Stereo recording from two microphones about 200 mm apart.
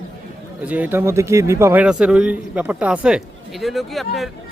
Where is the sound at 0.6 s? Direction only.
10° right (ahead or behind).